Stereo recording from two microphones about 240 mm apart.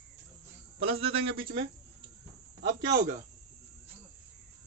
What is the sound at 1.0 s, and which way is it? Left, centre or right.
Speech, right.